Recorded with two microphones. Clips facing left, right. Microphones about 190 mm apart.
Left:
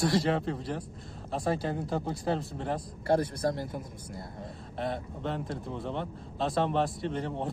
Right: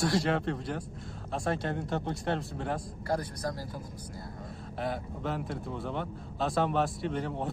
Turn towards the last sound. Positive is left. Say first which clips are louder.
# even
turn(degrees=0)  # may be behind; listen again after turning